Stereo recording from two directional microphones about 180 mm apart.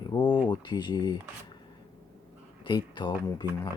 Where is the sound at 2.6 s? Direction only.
25° left (ahead or behind).